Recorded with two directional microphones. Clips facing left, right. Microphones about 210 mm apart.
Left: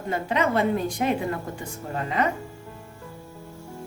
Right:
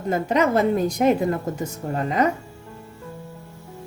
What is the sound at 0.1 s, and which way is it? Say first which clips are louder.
A woman's voice: right 4 dB; 40° right (ahead or behind).